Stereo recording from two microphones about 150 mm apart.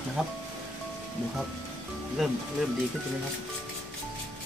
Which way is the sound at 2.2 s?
Centre (ahead or behind).